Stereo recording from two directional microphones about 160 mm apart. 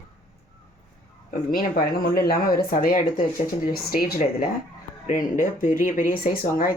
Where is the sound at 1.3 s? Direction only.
60° left (ahead or behind).